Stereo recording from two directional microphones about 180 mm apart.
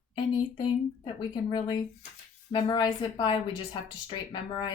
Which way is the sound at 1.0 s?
25° left (ahead or behind).